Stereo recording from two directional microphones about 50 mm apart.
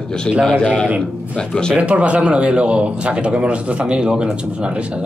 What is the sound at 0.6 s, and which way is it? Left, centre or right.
A man's voice, left.